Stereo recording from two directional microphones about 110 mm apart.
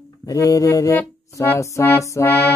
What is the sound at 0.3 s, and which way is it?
Speech, 30° left (ahead or behind).